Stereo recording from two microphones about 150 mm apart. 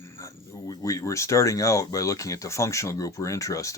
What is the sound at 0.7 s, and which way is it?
Speech, 25° left (ahead or behind).